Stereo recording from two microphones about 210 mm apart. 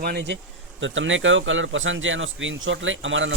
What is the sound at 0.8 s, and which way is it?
Speech, 65° right (ahead or behind).